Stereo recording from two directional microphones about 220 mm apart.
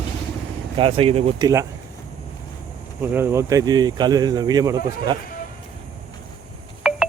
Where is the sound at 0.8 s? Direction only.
25° right (ahead or behind).